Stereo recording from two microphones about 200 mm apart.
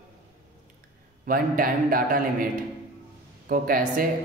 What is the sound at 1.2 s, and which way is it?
A man's voice, 45° right (ahead or behind).